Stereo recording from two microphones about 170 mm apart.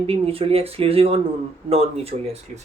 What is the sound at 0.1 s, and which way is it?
Speech, 35° right (ahead or behind).